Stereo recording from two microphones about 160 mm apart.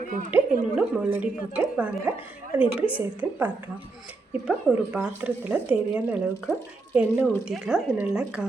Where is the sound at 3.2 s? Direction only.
15° right (ahead or behind).